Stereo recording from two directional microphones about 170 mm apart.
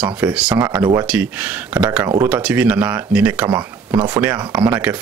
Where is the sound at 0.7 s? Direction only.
20° right (ahead or behind).